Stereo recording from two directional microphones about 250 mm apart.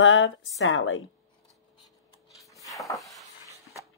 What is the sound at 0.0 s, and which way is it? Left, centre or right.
A woman's voice, left.